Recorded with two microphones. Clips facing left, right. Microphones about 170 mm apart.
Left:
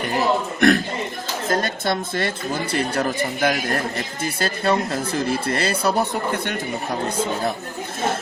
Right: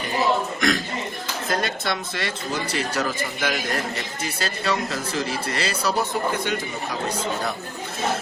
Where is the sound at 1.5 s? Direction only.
50° left (ahead or behind).